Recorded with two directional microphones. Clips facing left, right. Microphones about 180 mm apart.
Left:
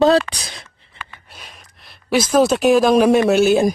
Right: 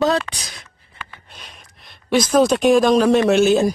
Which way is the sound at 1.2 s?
5° left (ahead or behind).